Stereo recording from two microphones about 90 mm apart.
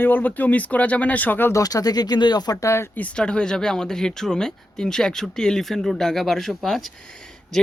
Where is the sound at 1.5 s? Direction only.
40° left (ahead or behind).